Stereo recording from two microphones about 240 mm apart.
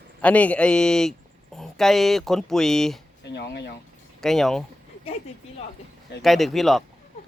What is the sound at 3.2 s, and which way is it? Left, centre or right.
Speech, left.